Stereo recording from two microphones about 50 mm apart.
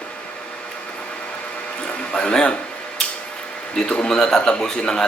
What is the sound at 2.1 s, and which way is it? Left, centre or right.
Speech, centre.